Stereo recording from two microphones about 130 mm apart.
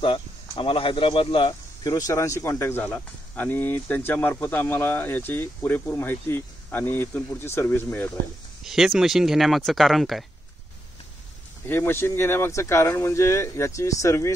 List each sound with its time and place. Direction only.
0.0 s speech: 45° left (ahead or behind); by 8.1 s 15° left (ahead or behind)
8.6 s speech: centre (ahead or behind)
11.6 s speech: 15° left (ahead or behind)